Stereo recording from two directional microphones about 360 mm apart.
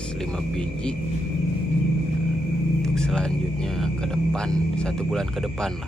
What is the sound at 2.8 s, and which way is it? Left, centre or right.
Speech, centre.